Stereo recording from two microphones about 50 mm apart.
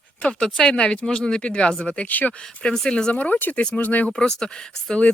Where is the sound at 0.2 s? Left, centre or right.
Left.